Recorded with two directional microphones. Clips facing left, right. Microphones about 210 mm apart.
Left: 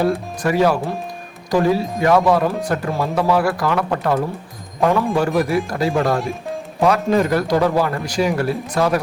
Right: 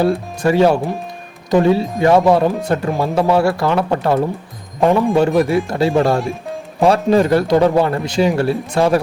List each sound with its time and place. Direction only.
0.4 s a man's voice: 25° right (ahead or behind)